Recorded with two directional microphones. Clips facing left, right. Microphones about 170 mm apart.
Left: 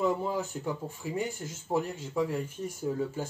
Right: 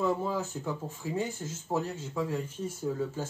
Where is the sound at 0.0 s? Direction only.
15° left (ahead or behind).